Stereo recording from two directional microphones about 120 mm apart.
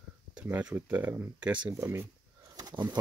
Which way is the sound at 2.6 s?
35° right (ahead or behind).